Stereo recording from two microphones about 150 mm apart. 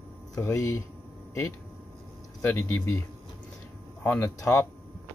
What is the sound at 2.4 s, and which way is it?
Speech, 15° left (ahead or behind).